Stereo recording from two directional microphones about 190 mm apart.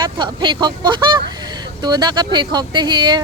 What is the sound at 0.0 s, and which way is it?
Speech, 25° right (ahead or behind).